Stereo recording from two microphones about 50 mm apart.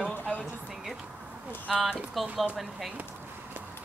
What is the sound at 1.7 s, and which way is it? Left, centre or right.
Speech, centre.